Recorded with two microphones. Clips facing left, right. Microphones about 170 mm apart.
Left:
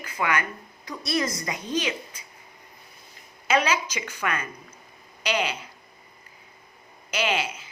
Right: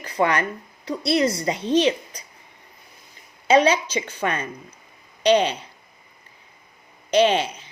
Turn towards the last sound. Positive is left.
turn(degrees=-35)  # may be behind; listen again after turning